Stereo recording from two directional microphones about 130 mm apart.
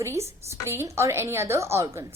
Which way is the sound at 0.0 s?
20° right (ahead or behind).